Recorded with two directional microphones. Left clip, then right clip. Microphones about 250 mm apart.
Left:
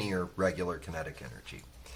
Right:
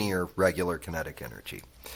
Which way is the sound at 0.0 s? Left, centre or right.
Right.